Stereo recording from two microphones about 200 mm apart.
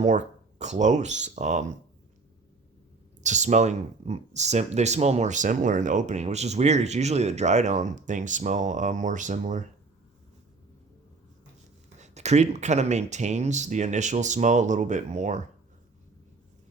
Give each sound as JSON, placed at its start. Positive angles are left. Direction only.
{"t": 0.0, "sound": "speech", "side_deg": -35}
{"t": 3.2, "sound": "speech", "side_deg": -35}
{"t": 11.9, "sound": "speech", "side_deg": -35}